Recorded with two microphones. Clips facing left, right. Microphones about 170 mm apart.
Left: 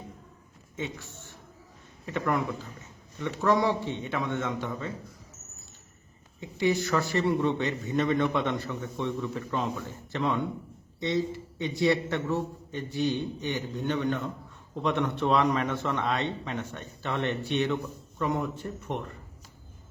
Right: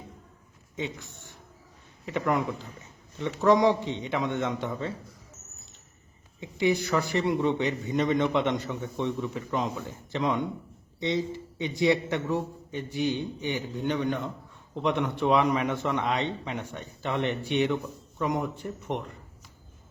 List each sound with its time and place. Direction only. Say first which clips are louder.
0.8 s a man's voice: right 1 dB; 15° right (ahead or behind)
6.4 s a man's voice: right 1 dB; 15° right (ahead or behind)